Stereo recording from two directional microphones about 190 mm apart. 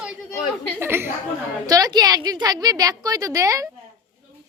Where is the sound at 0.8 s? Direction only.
10° right (ahead or behind).